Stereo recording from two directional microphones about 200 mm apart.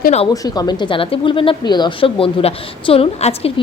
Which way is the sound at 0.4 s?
20° left (ahead or behind).